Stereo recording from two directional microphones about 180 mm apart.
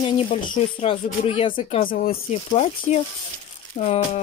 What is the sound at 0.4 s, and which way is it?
Speech, 30° left (ahead or behind).